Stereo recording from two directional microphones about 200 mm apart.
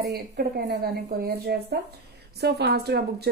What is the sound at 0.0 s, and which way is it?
A woman's voice, 55° right (ahead or behind).